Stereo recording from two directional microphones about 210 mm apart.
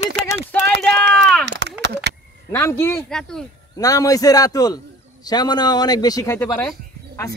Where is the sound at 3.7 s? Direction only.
15° left (ahead or behind).